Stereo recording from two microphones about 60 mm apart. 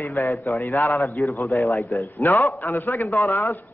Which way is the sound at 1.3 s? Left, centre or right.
Left.